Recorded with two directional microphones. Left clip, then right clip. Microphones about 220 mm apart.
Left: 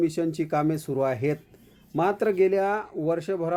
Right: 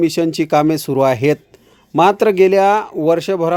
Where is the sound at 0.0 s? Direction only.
40° right (ahead or behind).